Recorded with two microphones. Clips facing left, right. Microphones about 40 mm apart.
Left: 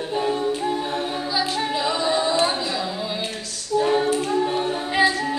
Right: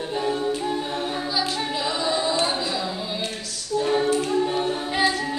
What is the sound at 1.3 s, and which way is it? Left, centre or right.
Female singing, centre.